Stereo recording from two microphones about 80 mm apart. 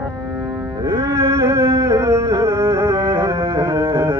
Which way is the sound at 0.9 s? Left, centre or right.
Right.